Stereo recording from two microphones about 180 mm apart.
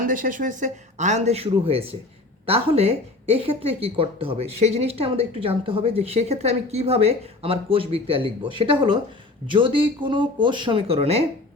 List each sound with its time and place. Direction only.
0.0 s a woman's voice: 50° right (ahead or behind)